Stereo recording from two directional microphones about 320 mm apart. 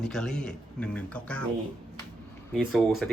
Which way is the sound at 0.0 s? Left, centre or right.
Centre.